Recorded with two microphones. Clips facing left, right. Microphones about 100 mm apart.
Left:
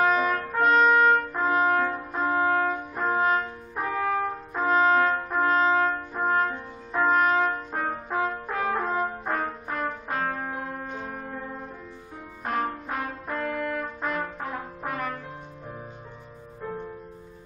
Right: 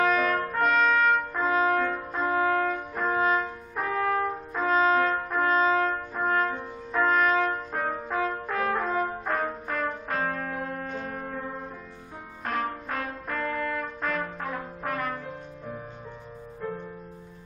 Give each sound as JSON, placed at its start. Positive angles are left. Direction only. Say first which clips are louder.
{"t": 0.0, "sound": "trumpet", "louder": "left 1 dB", "side_deg": 15}
{"t": 0.7, "sound": "trumpet", "louder": "left 4 dB", "side_deg": 25}
{"t": 1.4, "sound": "brass instrument", "louder": "left 1 dB", "side_deg": 10}
{"t": 10.2, "sound": "music", "louder": "even", "side_deg": 15}
{"t": 12.4, "sound": "music", "louder": "left 2 dB", "side_deg": 15}
{"t": 13.4, "sound": "brass instrument", "louder": "left 1 dB", "side_deg": 10}
{"t": 14.8, "sound": "music", "louder": "right 1 dB", "side_deg": 10}